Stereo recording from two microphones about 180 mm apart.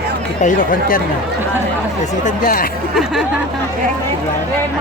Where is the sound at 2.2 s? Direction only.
55° left (ahead or behind).